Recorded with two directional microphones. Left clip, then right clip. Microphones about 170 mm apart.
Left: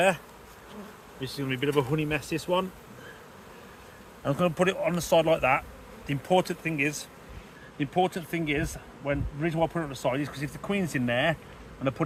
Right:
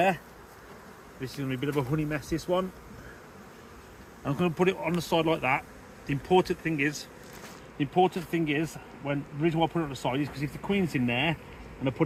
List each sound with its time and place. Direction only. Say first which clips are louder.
1.4 s speech: left 4 dB; 60° left (ahead or behind); by 2.6 s 75° left (ahead or behind)
4.2 s speech: left 2 dB; 90° left; by 5.6 s 70° left (ahead or behind)
6.1 s speech: even; 85° left
7.8 s speech: right 2 dB; 20° left (ahead or behind)